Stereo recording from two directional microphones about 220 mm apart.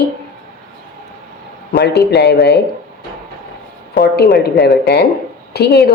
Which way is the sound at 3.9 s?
45° left (ahead or behind).